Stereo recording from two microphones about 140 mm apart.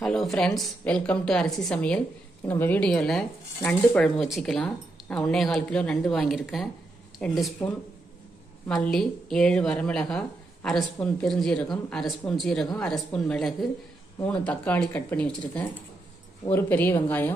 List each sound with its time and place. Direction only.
0.0 s speech: centre (ahead or behind)